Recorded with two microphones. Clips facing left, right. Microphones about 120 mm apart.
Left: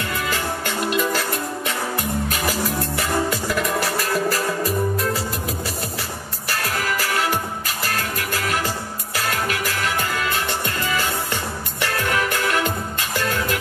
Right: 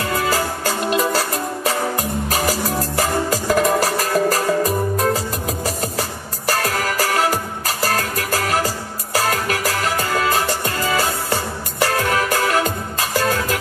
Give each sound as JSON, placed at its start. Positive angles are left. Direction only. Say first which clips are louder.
{"t": 0.0, "sound": "music", "louder": "right 5 dB", "side_deg": -35}